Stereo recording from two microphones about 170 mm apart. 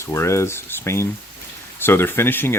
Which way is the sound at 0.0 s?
15° left (ahead or behind).